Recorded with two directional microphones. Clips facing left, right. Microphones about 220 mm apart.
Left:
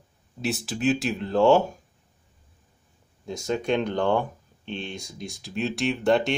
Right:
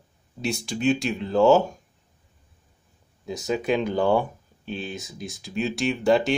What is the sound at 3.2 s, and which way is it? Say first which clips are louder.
Speech: right 1 dB; centre (ahead or behind).